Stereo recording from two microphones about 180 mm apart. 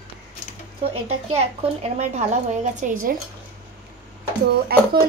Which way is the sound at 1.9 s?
40° right (ahead or behind).